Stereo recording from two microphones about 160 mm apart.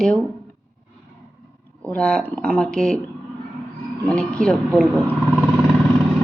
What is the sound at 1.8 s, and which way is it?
A woman's voice, 5° left (ahead or behind).